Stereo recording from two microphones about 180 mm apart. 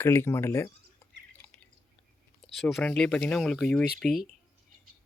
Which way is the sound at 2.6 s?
Centre (ahead or behind).